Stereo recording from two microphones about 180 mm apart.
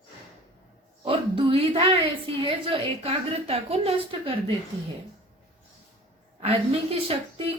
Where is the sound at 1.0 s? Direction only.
30° right (ahead or behind).